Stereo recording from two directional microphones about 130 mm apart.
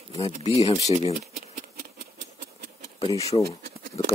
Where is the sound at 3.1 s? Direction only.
25° left (ahead or behind).